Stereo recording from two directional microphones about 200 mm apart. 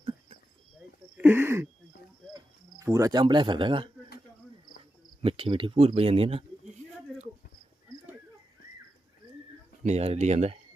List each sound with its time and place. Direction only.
0.0 s a sound: 25° right (ahead or behind)
1.1 s speech: 10° right (ahead or behind)
2.8 s speech: 15° right (ahead or behind)
5.2 s speech: 25° right (ahead or behind)
9.8 s speech: 35° right (ahead or behind)